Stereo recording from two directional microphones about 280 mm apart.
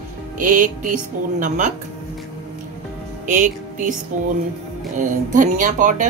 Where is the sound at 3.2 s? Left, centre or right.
Right.